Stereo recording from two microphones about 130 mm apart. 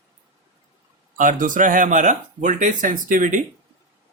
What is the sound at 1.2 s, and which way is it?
Speech, 90° right.